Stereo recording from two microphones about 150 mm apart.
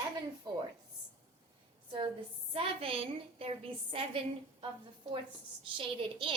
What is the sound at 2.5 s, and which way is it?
A woman's voice, 40° right (ahead or behind).